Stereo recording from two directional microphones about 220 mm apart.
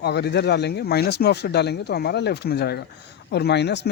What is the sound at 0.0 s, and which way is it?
Speech, 50° left (ahead or behind).